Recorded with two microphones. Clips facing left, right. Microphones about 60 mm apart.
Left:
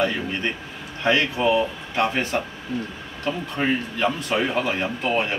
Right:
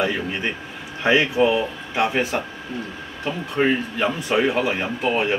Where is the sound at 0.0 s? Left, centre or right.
Centre.